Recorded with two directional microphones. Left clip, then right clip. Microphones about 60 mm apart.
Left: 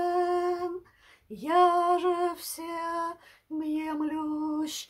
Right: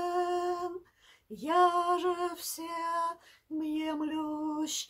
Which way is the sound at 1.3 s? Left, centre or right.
Left.